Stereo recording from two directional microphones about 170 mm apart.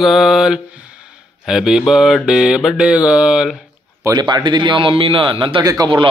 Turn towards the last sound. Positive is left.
turn(degrees=-25)  # may be behind; listen again after turning